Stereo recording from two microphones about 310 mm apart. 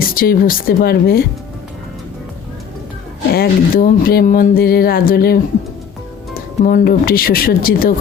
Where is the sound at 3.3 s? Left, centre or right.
Left.